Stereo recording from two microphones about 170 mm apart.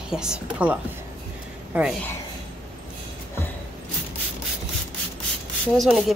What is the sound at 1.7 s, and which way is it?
Speech, 10° right (ahead or behind).